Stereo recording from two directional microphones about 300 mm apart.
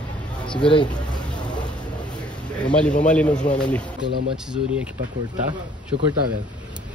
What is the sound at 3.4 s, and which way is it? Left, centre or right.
Speech, left.